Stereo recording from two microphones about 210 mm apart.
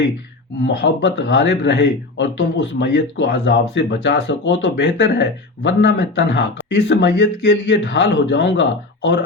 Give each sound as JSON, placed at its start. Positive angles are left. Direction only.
{"t": 0.6, "sound": "speech", "side_deg": 55}